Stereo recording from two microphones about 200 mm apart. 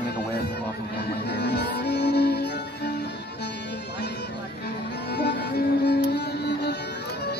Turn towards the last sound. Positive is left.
turn(degrees=55)  # may be behind; listen again after turning